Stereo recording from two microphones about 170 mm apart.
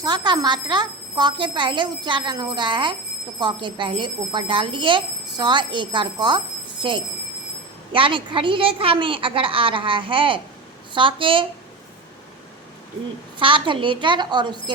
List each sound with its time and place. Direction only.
0.0 s speech: 25° right (ahead or behind)
7.9 s a woman's voice: 30° right (ahead or behind)
13.4 s speech: 30° right (ahead or behind)